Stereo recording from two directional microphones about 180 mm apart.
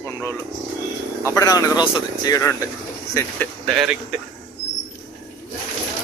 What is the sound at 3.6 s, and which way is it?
Speech, centre (ahead or behind).